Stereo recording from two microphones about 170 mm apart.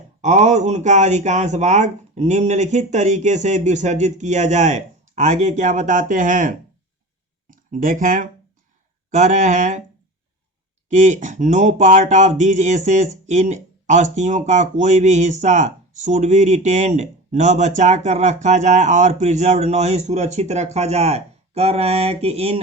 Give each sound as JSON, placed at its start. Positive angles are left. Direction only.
{"t": 0.2, "sound": "speech", "side_deg": -45}
{"t": 10.8, "sound": "speech", "side_deg": -45}